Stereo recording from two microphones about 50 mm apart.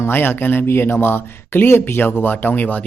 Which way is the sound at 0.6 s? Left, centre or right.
Left.